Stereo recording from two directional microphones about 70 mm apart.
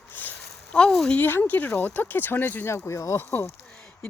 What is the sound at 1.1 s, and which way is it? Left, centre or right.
A woman's voice, left.